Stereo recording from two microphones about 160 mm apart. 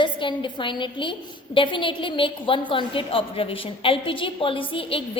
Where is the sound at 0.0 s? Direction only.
30° left (ahead or behind).